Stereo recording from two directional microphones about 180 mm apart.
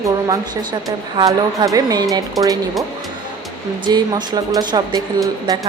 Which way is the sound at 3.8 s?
25° right (ahead or behind).